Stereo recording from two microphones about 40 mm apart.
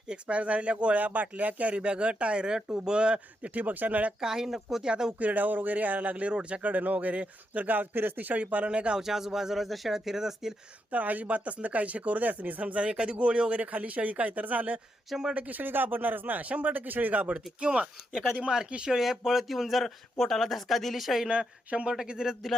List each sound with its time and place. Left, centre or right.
0.1 s speech: right
0.9 s speech: right
1.8 s speech: right
3.5 s speech: right
4.2 s speech: centre
5.2 s speech: right
8.4 s speech: right
8.7 s speech: right
9.0 s speech: centre
10.9 s speech: right
16.5 s speech: right
16.7 s speech: right; by 21.2 s centre
21.2 s speech: right